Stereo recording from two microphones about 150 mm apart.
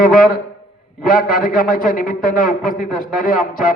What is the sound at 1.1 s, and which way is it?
A man's voice, 70° left (ahead or behind).